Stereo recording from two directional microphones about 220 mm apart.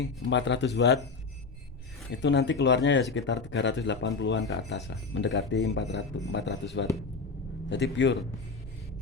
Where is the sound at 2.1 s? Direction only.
55° left (ahead or behind).